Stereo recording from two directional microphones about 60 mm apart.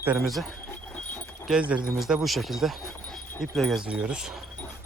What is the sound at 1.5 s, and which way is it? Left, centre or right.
Speech, right.